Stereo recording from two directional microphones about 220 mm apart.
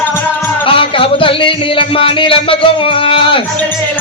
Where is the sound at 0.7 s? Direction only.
25° left (ahead or behind).